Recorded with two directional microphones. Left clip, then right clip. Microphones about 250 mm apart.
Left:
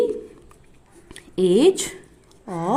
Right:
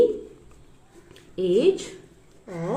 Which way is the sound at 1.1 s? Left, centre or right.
Left.